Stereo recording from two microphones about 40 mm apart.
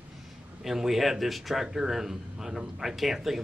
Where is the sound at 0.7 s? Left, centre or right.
Centre.